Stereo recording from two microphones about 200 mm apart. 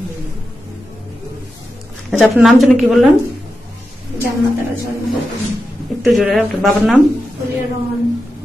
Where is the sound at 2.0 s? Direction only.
Centre (ahead or behind).